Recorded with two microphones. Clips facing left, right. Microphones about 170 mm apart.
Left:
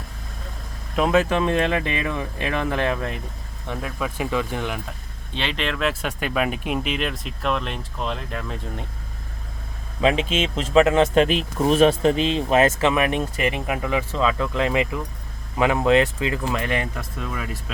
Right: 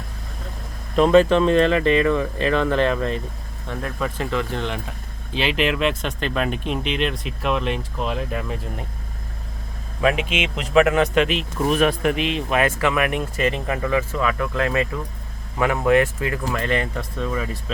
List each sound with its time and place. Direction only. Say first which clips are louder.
0.9 s speech: right 5 dB; 5° left (ahead or behind)
5.3 s speech: right 5 dB; 5° right (ahead or behind)
5.9 s speech: right 1 dB; 10° left (ahead or behind); by 8.5 s 10° right (ahead or behind)
10.0 s speech: left 1 dB; 25° left (ahead or behind)
11.7 s speech: left 3 dB; 25° left (ahead or behind)